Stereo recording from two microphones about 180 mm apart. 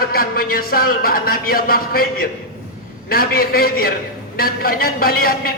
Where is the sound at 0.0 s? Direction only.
55° left (ahead or behind).